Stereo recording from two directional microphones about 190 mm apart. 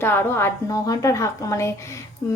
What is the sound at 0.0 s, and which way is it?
A woman's voice, 10° left (ahead or behind).